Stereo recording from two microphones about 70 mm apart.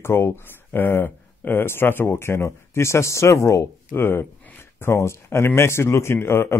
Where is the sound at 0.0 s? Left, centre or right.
Left.